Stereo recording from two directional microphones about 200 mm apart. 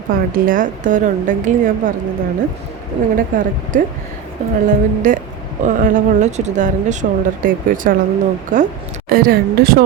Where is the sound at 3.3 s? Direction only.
45° right (ahead or behind).